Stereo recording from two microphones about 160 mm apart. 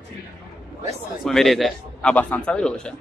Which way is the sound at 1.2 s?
Centre (ahead or behind).